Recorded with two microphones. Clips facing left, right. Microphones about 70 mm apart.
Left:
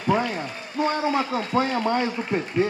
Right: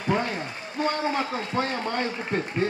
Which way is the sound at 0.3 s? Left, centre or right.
Left.